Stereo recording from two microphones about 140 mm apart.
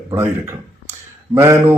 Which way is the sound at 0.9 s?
20° right (ahead or behind).